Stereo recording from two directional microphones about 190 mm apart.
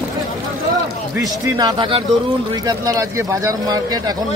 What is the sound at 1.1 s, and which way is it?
Speech, 20° right (ahead or behind).